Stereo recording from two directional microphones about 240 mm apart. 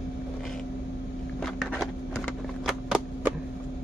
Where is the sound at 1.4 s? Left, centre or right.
Centre.